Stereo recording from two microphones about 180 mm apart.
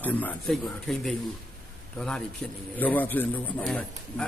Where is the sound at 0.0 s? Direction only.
10° left (ahead or behind).